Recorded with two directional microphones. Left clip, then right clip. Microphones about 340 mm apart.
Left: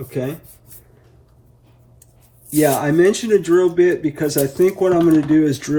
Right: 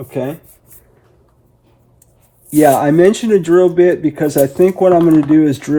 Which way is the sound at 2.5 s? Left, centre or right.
Right.